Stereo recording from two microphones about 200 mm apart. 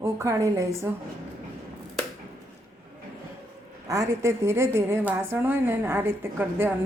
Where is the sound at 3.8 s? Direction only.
15° right (ahead or behind).